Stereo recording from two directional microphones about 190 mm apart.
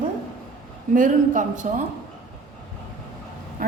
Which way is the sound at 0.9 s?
45° right (ahead or behind).